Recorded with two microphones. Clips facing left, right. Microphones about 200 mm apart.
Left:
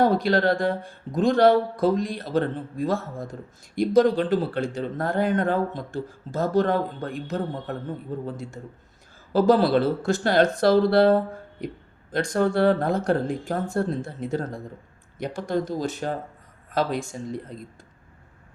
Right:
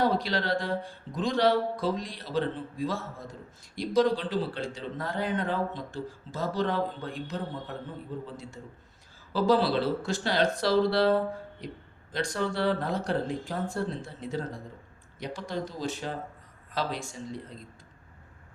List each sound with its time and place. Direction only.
0.0 s speech: 50° left (ahead or behind)
9.3 s speech: 50° left (ahead or behind)